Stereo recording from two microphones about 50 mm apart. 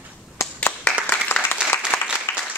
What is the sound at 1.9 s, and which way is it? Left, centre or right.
Applause, left.